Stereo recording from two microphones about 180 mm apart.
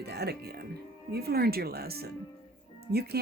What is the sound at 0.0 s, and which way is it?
Speech, 65° right (ahead or behind).